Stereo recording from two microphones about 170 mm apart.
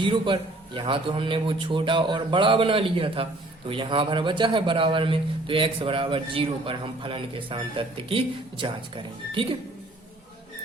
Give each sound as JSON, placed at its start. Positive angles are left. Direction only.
{"t": 0.0, "sound": "a man's voice", "side_deg": -30}